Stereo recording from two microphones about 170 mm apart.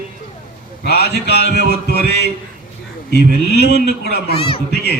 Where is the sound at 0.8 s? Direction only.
70° left (ahead or behind).